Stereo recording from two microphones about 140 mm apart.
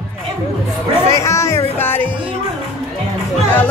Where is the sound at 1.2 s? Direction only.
20° left (ahead or behind).